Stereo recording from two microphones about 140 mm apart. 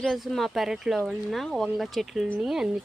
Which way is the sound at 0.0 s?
Centre (ahead or behind).